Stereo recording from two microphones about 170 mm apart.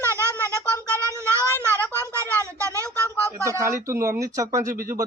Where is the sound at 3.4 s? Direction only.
15° right (ahead or behind).